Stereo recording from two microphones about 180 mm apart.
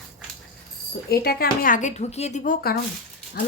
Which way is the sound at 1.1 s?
60° left (ahead or behind).